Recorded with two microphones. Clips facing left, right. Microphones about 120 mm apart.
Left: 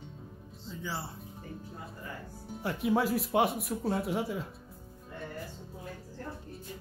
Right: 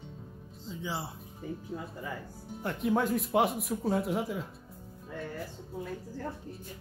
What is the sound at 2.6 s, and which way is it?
Speech, centre (ahead or behind).